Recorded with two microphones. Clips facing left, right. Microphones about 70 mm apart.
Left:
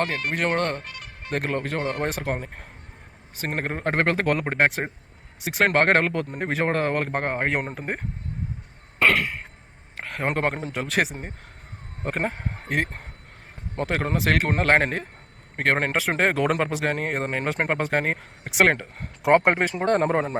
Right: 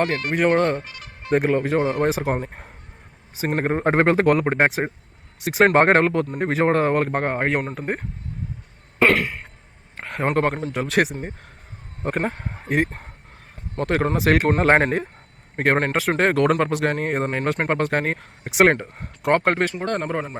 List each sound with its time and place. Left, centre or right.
0.0 s speech: centre
9.0 s cough: centre
10.0 s a man's voice: centre
19.3 s speech: centre
20.0 s speech: left